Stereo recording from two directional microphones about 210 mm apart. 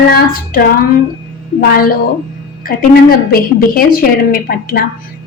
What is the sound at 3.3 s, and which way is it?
A woman's voice, 45° left (ahead or behind).